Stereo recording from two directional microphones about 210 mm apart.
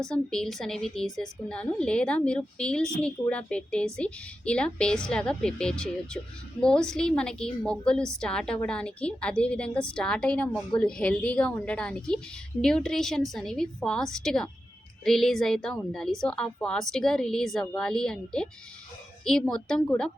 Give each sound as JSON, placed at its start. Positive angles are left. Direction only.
{"t": 0.0, "sound": "a woman's voice", "side_deg": 5}